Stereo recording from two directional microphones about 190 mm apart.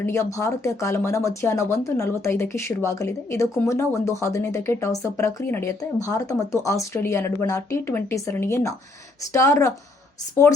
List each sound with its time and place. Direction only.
0.0 s speech: 15° left (ahead or behind)